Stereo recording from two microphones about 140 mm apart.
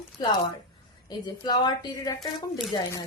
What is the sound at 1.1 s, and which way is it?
Speech, 30° left (ahead or behind).